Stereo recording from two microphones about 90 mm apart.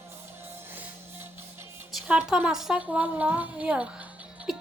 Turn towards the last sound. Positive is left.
turn(degrees=-5)  # may be behind; listen again after turning